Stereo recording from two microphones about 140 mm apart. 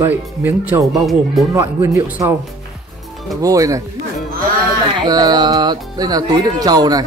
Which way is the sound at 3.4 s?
25° right (ahead or behind).